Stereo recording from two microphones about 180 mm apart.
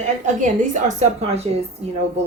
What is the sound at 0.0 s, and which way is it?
Speech, 45° right (ahead or behind).